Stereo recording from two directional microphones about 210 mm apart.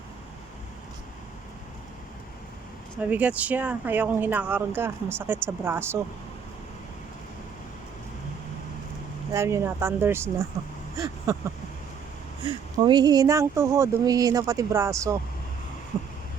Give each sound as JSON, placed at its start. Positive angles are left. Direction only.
{"t": 3.0, "sound": "speech", "side_deg": -5}
{"t": 9.3, "sound": "speech", "side_deg": -15}
{"t": 10.9, "sound": "a sound", "side_deg": -15}
{"t": 12.7, "sound": "speech", "side_deg": -20}